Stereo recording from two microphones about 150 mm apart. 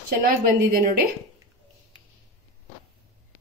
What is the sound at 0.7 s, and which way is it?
Speech, 80° right.